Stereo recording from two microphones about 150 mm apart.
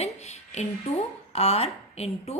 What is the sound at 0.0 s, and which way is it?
A woman's voice, 50° left (ahead or behind).